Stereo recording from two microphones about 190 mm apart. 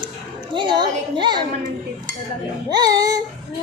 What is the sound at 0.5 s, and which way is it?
Speech, 25° right (ahead or behind).